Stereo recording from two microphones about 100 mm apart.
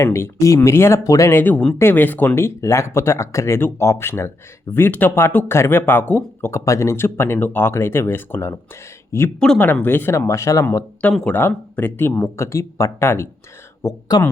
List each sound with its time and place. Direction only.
0.0 s speech: 30° left (ahead or behind)
9.4 s speech: 5° left (ahead or behind)
9.8 s speech: 20° left (ahead or behind)
11.3 s speech: 20° left (ahead or behind)